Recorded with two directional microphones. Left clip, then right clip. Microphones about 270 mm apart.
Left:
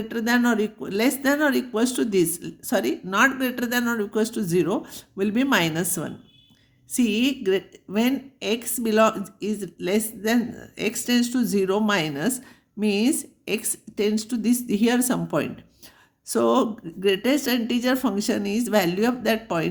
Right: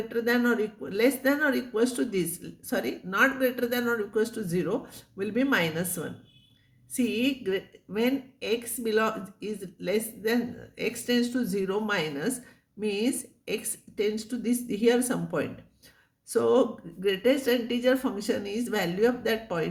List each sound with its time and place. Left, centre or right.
0.1 s speech: left